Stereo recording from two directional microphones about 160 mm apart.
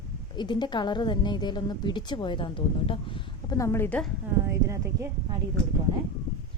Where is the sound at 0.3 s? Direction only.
30° left (ahead or behind).